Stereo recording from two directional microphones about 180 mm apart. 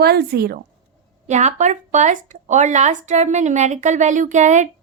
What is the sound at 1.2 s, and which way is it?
Speech, 40° right (ahead or behind).